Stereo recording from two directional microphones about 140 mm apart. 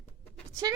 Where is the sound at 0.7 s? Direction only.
25° right (ahead or behind).